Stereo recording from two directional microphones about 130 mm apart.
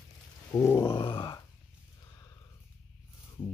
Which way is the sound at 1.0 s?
40° left (ahead or behind).